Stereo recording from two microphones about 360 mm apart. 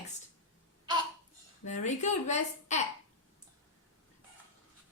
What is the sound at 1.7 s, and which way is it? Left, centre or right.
A woman's voice, centre.